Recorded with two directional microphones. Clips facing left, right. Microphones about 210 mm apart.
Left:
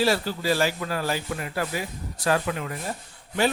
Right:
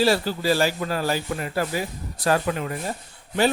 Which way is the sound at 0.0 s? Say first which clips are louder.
Right 3 dB; 30° right (ahead or behind).